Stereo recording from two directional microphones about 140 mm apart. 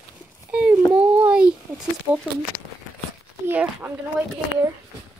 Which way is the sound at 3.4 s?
15° right (ahead or behind).